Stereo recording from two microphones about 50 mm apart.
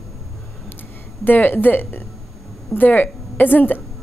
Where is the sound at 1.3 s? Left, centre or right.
Left.